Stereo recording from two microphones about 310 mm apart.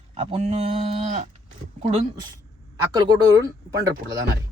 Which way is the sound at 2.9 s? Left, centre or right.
Centre.